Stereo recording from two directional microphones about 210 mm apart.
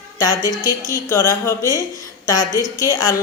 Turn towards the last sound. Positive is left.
turn(degrees=15)  # may be behind; listen again after turning